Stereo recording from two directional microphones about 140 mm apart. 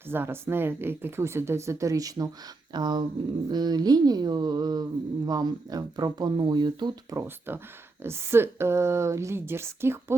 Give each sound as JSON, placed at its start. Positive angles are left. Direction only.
{"t": 0.1, "sound": "speech", "side_deg": -15}
{"t": 7.2, "sound": "speech", "side_deg": -15}